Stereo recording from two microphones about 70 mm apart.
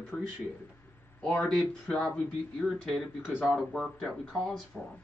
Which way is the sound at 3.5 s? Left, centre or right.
Centre.